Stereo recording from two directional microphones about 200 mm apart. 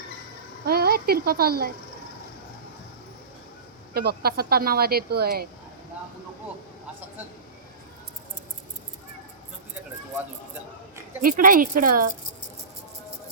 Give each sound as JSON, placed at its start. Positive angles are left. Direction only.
{"t": 0.6, "sound": "speech", "side_deg": -50}
{"t": 3.9, "sound": "a woman's voice", "side_deg": -50}
{"t": 11.2, "sound": "a woman's voice", "side_deg": -45}